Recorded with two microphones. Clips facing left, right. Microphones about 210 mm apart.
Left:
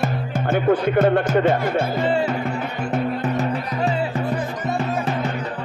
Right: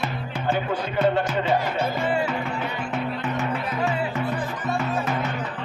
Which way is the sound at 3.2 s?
35° left (ahead or behind).